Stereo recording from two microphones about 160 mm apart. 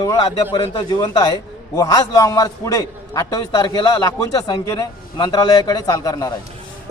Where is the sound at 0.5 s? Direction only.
30° left (ahead or behind).